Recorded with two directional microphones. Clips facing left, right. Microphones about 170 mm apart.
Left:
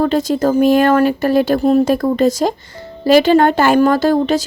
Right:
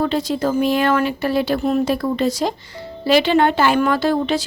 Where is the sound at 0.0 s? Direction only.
45° left (ahead or behind).